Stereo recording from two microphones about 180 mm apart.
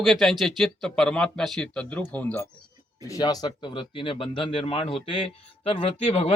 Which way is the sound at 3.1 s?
20° left (ahead or behind).